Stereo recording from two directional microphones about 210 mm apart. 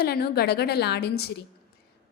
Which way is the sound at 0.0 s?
50° left (ahead or behind).